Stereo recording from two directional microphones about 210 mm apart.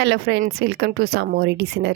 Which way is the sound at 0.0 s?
55° right (ahead or behind).